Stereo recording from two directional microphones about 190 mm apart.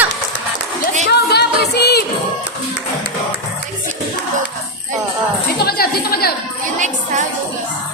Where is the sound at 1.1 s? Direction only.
60° left (ahead or behind).